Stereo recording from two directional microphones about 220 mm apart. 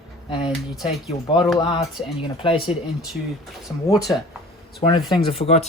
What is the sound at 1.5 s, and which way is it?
Speech, 20° left (ahead or behind).